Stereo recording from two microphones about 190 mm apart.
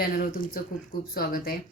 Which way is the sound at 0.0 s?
50° left (ahead or behind).